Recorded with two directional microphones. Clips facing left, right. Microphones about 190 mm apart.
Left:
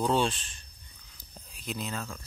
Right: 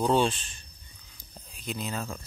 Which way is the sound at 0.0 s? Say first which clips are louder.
Right 3 dB; centre (ahead or behind).